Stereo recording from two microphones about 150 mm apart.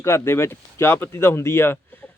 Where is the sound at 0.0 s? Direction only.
20° left (ahead or behind).